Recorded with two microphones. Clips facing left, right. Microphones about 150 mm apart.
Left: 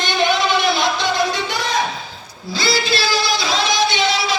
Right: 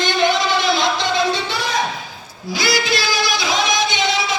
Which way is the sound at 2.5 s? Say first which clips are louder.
Even; 15° right (ahead or behind).